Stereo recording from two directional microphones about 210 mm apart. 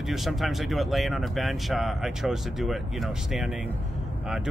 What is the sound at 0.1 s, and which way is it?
Speech, centre (ahead or behind).